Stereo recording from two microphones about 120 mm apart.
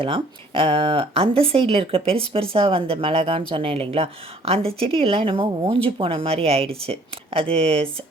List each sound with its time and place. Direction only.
0.0 s speech: 50° right (ahead or behind)